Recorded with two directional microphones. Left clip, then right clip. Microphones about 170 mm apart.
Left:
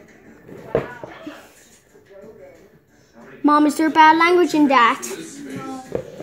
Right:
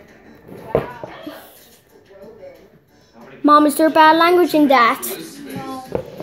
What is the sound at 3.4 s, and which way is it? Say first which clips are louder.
A woman's voice: right 4 dB; 40° left (ahead or behind).